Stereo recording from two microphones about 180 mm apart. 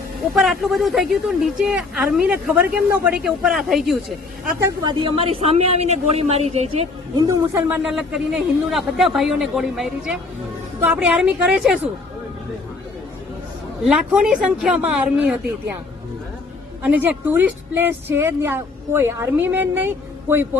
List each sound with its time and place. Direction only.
0.3 s speech: centre (ahead or behind)
4.6 s a man's voice: 25° right (ahead or behind)
7.2 s a woman's voice: 15° right (ahead or behind)
7.8 s speech: centre (ahead or behind)
13.8 s speech: 5° right (ahead or behind)
16.8 s a woman's voice: 10° right (ahead or behind)